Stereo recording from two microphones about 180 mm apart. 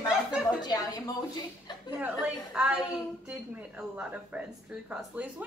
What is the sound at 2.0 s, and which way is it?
A woman's voice, 5° right (ahead or behind).